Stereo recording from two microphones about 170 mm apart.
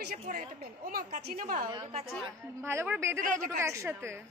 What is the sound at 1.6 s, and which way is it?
Speech, 30° right (ahead or behind).